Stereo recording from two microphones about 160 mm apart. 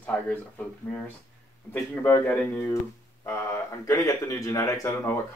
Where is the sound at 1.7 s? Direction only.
10° left (ahead or behind).